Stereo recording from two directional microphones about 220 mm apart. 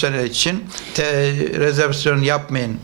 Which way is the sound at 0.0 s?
15° right (ahead or behind).